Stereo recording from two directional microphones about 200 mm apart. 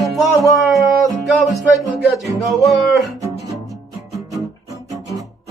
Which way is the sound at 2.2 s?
Centre (ahead or behind).